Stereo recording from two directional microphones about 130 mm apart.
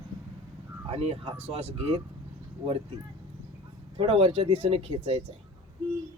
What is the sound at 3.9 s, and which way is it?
Speech, 45° right (ahead or behind).